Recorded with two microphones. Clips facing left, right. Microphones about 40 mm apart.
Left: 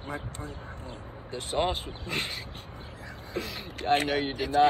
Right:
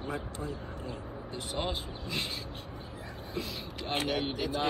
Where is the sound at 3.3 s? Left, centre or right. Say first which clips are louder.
Left 3 dB; left.